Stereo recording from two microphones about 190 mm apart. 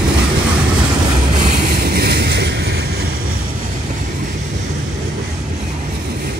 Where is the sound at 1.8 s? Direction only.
55° right (ahead or behind).